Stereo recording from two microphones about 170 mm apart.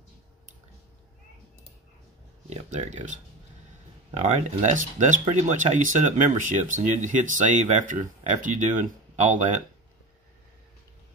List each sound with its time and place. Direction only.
2.5 s speech: 45° right (ahead or behind)